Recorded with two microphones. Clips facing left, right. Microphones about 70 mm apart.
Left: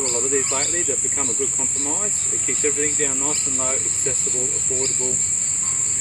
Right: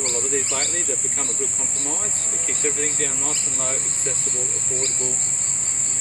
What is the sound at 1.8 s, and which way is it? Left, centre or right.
Speech, centre.